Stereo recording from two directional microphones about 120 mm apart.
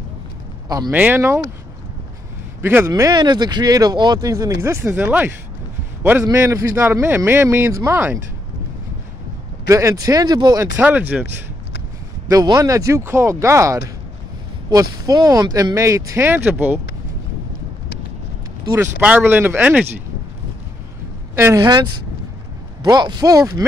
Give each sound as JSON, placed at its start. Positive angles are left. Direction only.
{"t": 0.9, "sound": "speech", "side_deg": -15}
{"t": 2.6, "sound": "speech", "side_deg": -20}
{"t": 2.9, "sound": "speech", "side_deg": -35}
{"t": 9.7, "sound": "speech", "side_deg": -25}
{"t": 10.8, "sound": "speech", "side_deg": -15}
{"t": 12.3, "sound": "speech", "side_deg": -30}
{"t": 18.9, "sound": "speech", "side_deg": -15}
{"t": 21.5, "sound": "speech", "side_deg": -35}
{"t": 22.8, "sound": "speech", "side_deg": -35}